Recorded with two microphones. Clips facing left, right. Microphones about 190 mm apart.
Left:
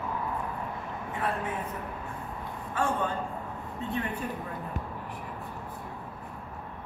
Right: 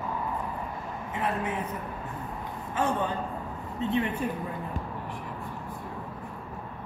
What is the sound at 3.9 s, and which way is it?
Speech, 45° left (ahead or behind).